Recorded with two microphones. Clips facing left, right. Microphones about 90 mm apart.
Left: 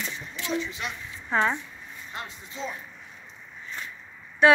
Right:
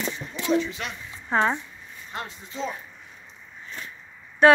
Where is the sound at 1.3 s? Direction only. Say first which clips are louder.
Right 2 dB; 35° right (ahead or behind).